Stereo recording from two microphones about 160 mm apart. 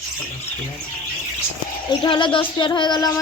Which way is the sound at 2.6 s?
30° left (ahead or behind).